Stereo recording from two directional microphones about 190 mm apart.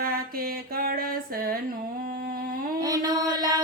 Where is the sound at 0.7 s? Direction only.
50° right (ahead or behind).